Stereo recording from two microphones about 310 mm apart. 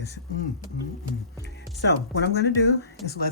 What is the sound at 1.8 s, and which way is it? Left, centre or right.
Speech, left.